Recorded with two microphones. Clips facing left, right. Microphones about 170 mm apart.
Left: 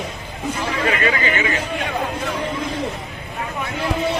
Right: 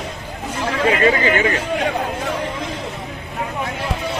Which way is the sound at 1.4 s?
45° right (ahead or behind).